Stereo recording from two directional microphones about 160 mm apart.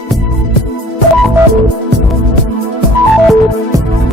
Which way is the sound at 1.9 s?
90° right.